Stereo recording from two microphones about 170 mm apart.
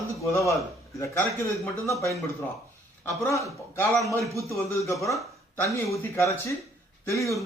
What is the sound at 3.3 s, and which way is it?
Speech, 20° left (ahead or behind).